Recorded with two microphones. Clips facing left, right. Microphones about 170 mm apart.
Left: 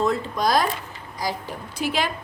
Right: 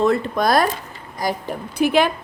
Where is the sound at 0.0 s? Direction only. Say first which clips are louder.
Right 4 dB; 65° right (ahead or behind).